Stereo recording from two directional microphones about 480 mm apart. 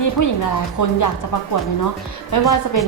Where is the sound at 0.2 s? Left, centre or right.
Left.